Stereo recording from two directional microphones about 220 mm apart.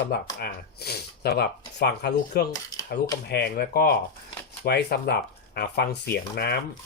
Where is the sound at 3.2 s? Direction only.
45° left (ahead or behind).